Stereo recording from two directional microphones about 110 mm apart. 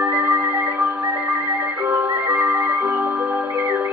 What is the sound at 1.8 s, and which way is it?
Music, 20° right (ahead or behind).